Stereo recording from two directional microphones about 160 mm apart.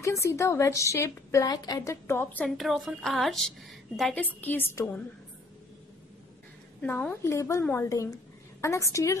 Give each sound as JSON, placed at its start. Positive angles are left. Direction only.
{"t": 0.0, "sound": "a woman's voice", "side_deg": 20}
{"t": 6.8, "sound": "a woman's voice", "side_deg": 10}